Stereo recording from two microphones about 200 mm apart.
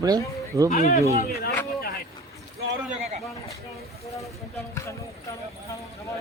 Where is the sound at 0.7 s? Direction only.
40° left (ahead or behind).